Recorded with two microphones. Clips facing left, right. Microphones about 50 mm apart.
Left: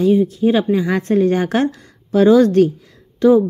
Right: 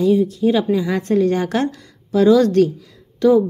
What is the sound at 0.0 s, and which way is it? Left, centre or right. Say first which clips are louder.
A woman's voice: left 1 dB; left.